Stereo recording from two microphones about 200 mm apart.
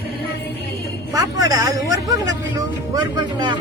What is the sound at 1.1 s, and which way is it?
Speech, 15° right (ahead or behind).